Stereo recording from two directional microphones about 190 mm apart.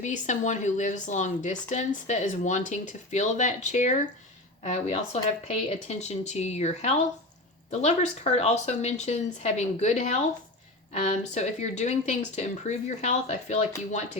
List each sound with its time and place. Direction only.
0.0 s speech: 40° left (ahead or behind)